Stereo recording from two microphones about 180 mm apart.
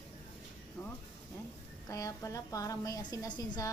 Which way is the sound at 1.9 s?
20° left (ahead or behind).